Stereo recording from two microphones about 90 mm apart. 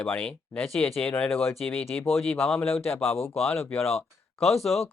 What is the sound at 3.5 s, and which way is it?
Speech, 25° left (ahead or behind).